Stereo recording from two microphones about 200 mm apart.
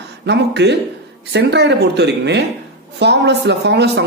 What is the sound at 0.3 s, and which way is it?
A man's voice, 60° right (ahead or behind).